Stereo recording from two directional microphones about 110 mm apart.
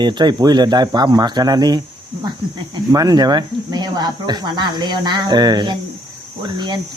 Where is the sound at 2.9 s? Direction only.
35° right (ahead or behind).